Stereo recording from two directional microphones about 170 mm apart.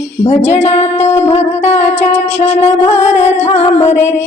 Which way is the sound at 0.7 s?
40° left (ahead or behind).